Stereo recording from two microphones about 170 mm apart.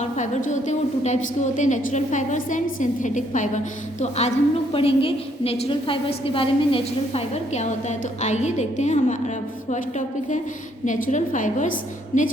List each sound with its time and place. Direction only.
0.0 s a woman's voice: 45° left (ahead or behind)
4.7 s a woman's voice: 35° left (ahead or behind)
10.8 s a woman's voice: 50° left (ahead or behind)